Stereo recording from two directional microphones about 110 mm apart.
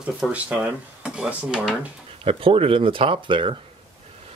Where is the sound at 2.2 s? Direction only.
60° right (ahead or behind).